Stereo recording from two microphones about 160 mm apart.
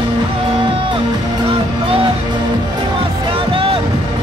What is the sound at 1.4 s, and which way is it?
Music, 35° right (ahead or behind).